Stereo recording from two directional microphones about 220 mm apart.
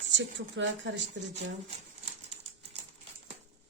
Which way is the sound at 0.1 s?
55° right (ahead or behind).